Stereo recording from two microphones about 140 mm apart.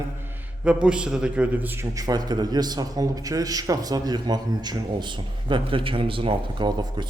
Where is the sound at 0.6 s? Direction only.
10° right (ahead or behind).